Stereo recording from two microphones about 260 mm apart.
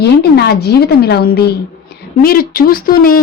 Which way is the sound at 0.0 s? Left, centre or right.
Left.